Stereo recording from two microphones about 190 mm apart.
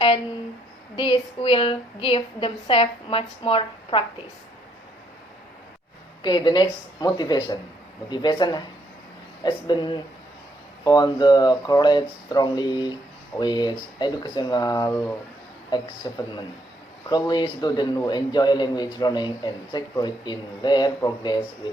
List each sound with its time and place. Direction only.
0.9 s a man's voice: 25° left (ahead or behind)
6.2 s a man's voice: 20° left (ahead or behind)